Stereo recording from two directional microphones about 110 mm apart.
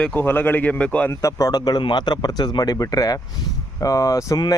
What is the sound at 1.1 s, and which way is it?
Speech, 30° left (ahead or behind).